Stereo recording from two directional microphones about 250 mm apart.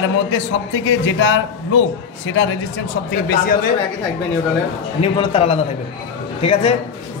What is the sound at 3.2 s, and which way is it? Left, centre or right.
Speech, left.